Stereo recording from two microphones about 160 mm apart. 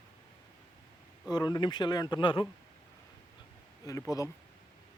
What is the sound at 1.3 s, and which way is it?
A man's voice, 25° left (ahead or behind).